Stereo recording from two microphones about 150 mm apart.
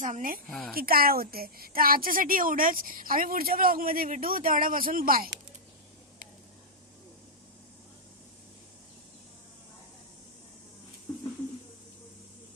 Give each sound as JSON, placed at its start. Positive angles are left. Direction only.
{"t": 0.0, "sound": "a woman's voice", "side_deg": -60}
{"t": 0.4, "sound": "speech", "side_deg": 5}
{"t": 0.8, "sound": "a woman's voice", "side_deg": -80}